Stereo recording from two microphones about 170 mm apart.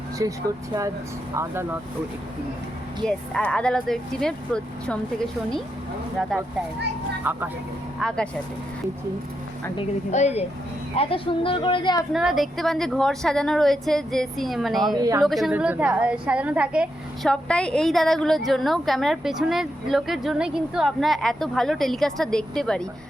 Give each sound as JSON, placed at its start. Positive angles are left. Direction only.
{"t": 0.2, "sound": "speech", "side_deg": -20}
{"t": 3.1, "sound": "a woman's voice", "side_deg": 5}
{"t": 6.2, "sound": "a woman's voice", "side_deg": -5}
{"t": 7.9, "sound": "a woman's voice", "side_deg": 5}
{"t": 10.1, "sound": "speech", "side_deg": 40}
{"t": 12.1, "sound": "a woman's voice", "side_deg": 0}
{"t": 14.9, "sound": "speech", "side_deg": -20}
{"t": 15.2, "sound": "a woman's voice", "side_deg": 0}
{"t": 17.3, "sound": "a woman's voice", "side_deg": 5}